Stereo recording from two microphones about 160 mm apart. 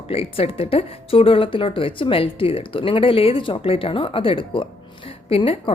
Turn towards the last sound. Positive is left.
turn(degrees=35)  # may be behind; listen again after turning